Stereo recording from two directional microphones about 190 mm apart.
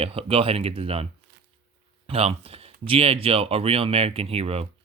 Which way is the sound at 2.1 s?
30° right (ahead or behind).